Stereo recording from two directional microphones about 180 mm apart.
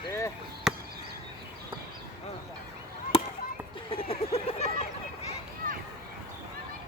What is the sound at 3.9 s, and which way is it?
Vehicle, 30° left (ahead or behind).